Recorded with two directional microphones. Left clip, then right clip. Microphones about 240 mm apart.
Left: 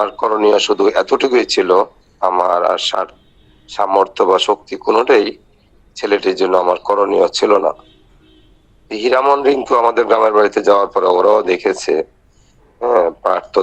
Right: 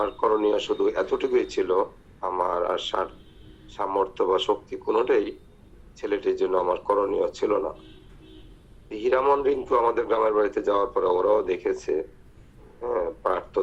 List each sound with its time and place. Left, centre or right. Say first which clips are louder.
0.0 s a man's voice: left 9 dB; left
8.9 s a man's voice: left 9 dB; left